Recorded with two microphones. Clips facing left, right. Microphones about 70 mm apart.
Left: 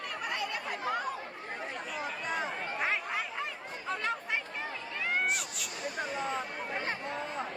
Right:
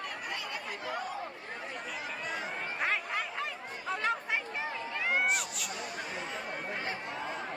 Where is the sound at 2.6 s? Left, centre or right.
Centre.